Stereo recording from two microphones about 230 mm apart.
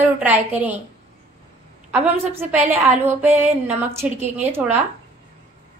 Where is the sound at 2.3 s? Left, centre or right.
Right.